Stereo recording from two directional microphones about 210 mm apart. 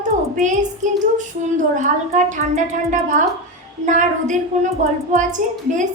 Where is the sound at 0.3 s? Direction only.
35° right (ahead or behind).